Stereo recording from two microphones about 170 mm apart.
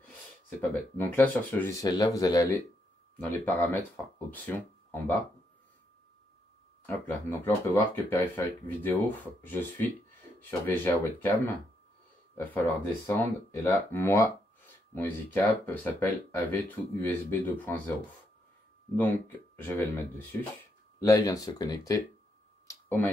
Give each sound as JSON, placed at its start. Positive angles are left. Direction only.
{"t": 0.6, "sound": "speech", "side_deg": 10}
{"t": 3.2, "sound": "speech", "side_deg": 10}
{"t": 6.9, "sound": "speech", "side_deg": 10}
{"t": 18.9, "sound": "speech", "side_deg": 10}
{"t": 22.7, "sound": "a sound", "side_deg": 15}